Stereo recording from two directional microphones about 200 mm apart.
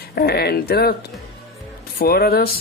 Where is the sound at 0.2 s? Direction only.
50° left (ahead or behind).